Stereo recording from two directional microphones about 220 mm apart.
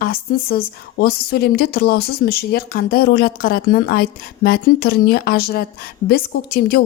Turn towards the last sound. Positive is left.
turn(degrees=45)  # may be behind; listen again after turning